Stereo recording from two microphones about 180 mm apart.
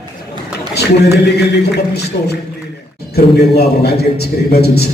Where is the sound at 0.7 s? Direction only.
65° left (ahead or behind).